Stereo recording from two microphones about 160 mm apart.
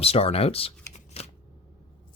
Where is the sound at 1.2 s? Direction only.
40° left (ahead or behind).